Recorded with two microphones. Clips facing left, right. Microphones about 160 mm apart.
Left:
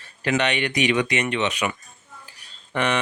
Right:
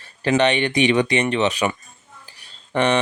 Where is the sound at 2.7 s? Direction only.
30° right (ahead or behind).